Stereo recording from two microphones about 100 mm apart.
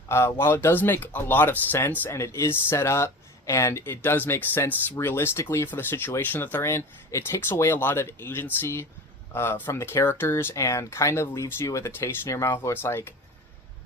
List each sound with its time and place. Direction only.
0.1 s speech: 25° left (ahead or behind)